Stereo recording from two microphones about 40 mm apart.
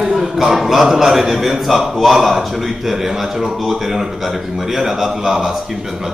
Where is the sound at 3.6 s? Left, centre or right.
Centre.